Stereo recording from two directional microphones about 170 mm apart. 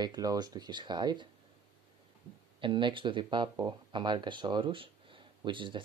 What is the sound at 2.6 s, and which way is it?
Speech, 30° right (ahead or behind).